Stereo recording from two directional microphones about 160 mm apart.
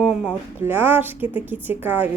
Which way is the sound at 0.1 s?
10° right (ahead or behind).